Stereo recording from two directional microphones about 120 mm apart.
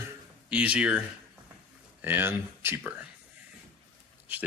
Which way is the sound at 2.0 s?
20° right (ahead or behind).